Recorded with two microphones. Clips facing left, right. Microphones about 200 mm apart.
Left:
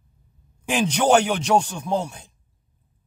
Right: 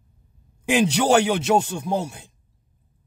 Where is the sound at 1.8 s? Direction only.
10° right (ahead or behind).